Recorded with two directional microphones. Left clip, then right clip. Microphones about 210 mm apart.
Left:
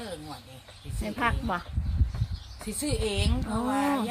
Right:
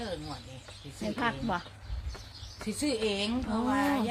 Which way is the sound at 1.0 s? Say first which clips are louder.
Left 3 dB; 30° left (ahead or behind).